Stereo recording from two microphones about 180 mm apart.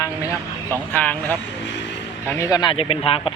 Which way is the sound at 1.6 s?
80° left.